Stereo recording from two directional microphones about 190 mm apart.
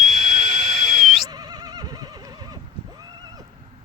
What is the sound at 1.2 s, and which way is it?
Neigh, 20° right (ahead or behind).